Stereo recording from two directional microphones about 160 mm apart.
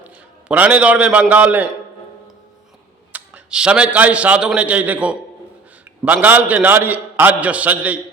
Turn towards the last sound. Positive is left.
turn(degrees=-10)  # may be behind; listen again after turning